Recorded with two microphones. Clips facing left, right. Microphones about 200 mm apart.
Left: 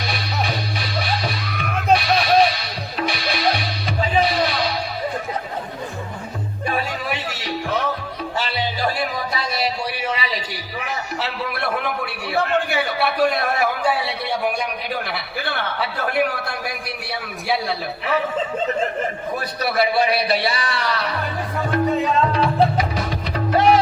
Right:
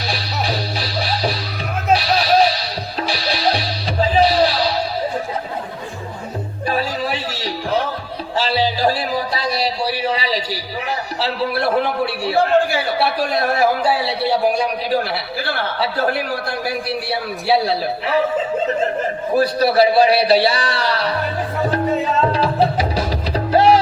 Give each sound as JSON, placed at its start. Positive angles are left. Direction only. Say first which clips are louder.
{"t": 0.1, "sound": "music", "louder": "right 3 dB", "side_deg": -30}
{"t": 6.7, "sound": "music", "louder": "right 4 dB", "side_deg": -30}
{"t": 19.4, "sound": "a man's voice", "louder": "right 8 dB", "side_deg": -30}
{"t": 22.6, "sound": "music", "louder": "right 2 dB", "side_deg": -30}